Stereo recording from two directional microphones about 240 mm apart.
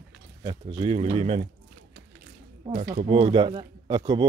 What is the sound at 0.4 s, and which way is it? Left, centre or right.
Speech, centre.